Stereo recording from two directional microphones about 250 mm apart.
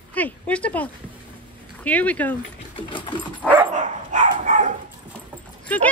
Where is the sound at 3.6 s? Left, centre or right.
Right.